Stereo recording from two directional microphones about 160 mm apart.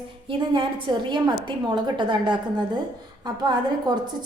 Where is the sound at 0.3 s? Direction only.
30° right (ahead or behind).